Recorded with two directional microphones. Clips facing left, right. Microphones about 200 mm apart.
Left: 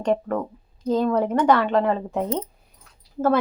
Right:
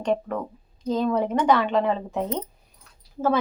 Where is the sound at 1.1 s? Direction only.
10° right (ahead or behind).